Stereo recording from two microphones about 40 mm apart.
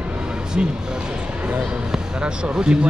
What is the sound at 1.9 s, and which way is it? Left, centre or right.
Speech, right.